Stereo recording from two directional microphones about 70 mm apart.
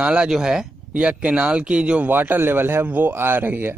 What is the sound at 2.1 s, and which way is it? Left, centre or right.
Speech, right.